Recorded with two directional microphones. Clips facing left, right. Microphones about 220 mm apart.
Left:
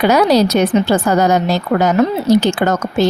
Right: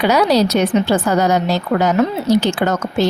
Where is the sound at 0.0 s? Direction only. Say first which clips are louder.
Left 2 dB; 50° left (ahead or behind).